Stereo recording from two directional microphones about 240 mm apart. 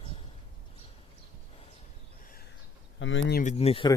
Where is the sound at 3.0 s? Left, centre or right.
Left.